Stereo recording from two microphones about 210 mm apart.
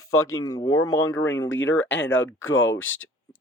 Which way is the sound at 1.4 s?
65° left (ahead or behind).